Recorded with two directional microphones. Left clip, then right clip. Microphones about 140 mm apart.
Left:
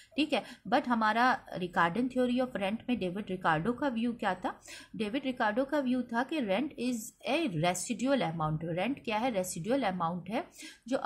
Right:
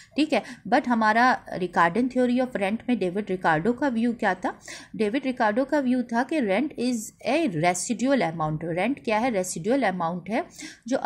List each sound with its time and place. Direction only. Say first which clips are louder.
0.1 s a woman's voice: right 7 dB; 45° right (ahead or behind)